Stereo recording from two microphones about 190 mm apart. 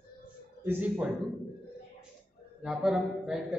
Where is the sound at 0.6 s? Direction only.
10° right (ahead or behind).